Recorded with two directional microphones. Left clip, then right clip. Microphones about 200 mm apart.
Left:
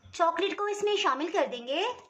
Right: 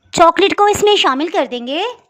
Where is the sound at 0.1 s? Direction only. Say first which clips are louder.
Right 17 dB; 55° right (ahead or behind).